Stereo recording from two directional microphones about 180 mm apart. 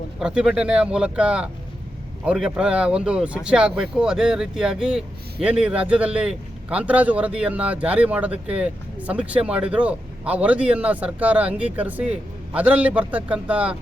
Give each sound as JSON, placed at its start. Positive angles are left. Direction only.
{"t": 0.2, "sound": "speech", "side_deg": -5}